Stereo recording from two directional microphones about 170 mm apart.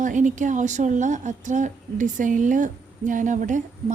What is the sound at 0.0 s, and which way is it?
A woman's voice, 50° right (ahead or behind).